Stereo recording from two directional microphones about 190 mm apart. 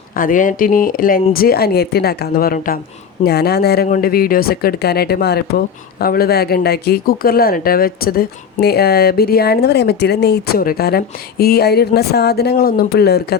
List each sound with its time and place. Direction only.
0.2 s speech: 45° left (ahead or behind)